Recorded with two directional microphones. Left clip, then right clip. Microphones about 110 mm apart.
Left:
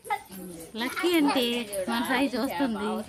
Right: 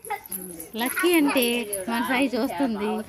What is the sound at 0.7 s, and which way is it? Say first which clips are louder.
Speech: right 4 dB; 25° right (ahead or behind).